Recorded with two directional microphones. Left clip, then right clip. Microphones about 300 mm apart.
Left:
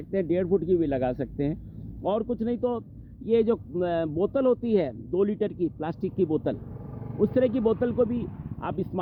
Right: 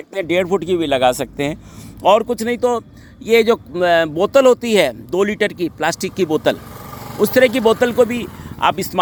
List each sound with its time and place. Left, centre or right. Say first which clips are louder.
0.1 s speech: right 8 dB; centre
7.2 s speech: right 11 dB; centre